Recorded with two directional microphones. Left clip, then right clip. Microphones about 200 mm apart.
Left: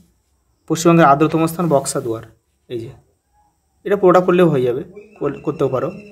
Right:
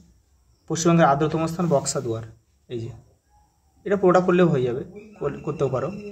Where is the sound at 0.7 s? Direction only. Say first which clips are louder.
Left 7 dB; 35° left (ahead or behind).